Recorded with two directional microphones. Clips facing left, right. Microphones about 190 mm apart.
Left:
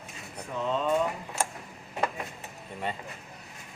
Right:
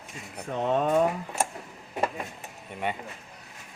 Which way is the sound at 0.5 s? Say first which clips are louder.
Right 3 dB; 65° right (ahead or behind).